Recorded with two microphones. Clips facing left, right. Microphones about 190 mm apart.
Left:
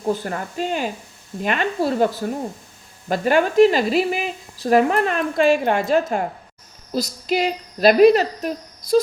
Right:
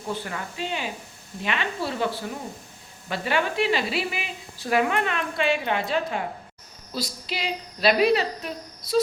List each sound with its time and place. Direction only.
0.0 s speech: 40° left (ahead or behind)